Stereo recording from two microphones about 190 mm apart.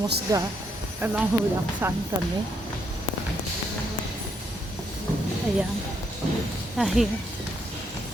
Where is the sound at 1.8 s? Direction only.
10° right (ahead or behind).